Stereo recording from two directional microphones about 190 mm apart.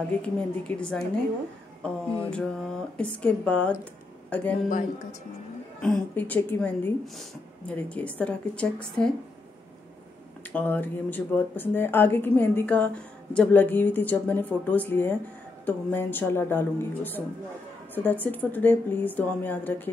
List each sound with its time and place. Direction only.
0.2 s a woman's voice: 5° left (ahead or behind)
2.3 s speech: 5° left (ahead or behind)
4.6 s speech: 45° left (ahead or behind)
5.8 s speech: 5° left (ahead or behind)
10.5 s speech: 10° left (ahead or behind)